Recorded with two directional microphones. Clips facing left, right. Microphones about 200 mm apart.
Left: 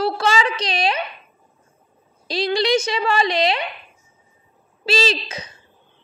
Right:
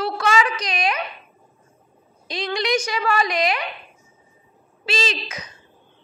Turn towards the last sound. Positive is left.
turn(degrees=30)  # may be behind; listen again after turning